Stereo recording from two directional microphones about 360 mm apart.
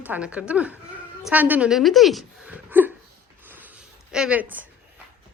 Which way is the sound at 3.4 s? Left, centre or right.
Centre.